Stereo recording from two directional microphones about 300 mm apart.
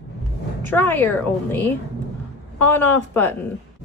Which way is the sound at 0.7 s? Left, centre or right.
Centre.